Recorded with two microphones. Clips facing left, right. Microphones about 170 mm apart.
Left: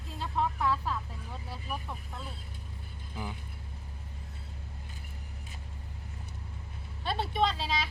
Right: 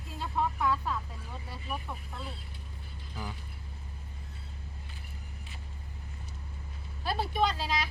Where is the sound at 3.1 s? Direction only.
20° left (ahead or behind).